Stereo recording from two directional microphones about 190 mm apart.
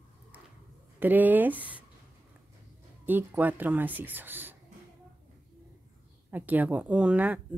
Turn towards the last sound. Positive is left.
turn(degrees=-10)  # may be behind; listen again after turning